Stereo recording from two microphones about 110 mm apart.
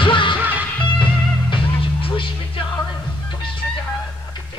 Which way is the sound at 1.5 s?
55° left (ahead or behind).